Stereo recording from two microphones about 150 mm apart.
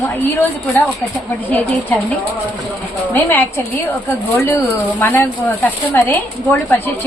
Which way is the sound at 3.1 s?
10° left (ahead or behind).